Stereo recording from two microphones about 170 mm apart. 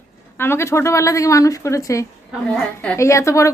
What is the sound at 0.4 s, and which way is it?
A woman's voice, 15° left (ahead or behind).